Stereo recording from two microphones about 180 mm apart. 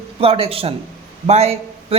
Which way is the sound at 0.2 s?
30° right (ahead or behind).